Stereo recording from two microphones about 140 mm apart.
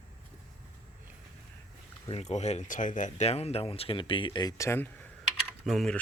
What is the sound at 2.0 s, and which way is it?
Speech, 50° left (ahead or behind).